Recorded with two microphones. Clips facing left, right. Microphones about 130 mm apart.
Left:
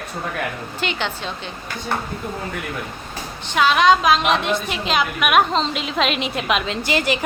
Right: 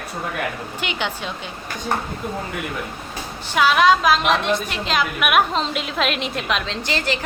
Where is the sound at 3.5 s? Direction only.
5° right (ahead or behind).